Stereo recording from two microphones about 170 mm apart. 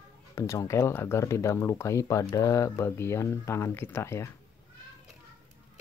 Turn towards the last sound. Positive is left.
turn(degrees=15)  # may be behind; listen again after turning